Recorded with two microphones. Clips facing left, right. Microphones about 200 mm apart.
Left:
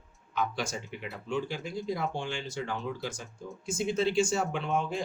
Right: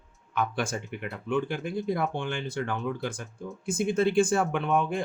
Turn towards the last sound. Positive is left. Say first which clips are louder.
# right 4 dB
turn(degrees=-55)  # may be behind; listen again after turning